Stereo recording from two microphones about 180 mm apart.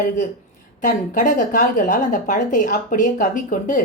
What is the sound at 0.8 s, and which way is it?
Speech, 45° left (ahead or behind).